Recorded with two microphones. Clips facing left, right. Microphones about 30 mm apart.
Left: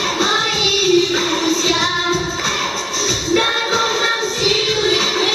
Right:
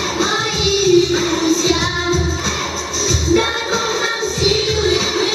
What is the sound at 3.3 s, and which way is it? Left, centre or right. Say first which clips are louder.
Music: even; centre.